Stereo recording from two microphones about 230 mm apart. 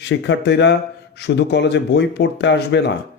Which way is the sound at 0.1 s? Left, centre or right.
Left.